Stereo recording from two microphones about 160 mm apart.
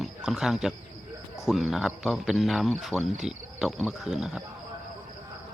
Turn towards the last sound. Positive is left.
turn(degrees=-5)  # may be behind; listen again after turning